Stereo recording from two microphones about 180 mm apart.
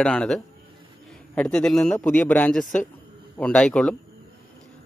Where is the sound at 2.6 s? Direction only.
45° left (ahead or behind).